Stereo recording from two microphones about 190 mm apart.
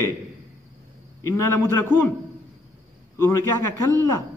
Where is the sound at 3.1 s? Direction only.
15° left (ahead or behind).